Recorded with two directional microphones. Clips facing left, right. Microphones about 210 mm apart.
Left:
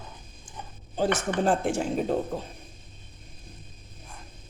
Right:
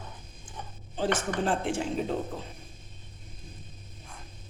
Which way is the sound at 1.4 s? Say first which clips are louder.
Left 5 dB; 45° left (ahead or behind).